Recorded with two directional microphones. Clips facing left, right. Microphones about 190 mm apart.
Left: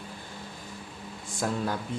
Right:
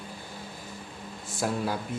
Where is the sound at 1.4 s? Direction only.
5° right (ahead or behind).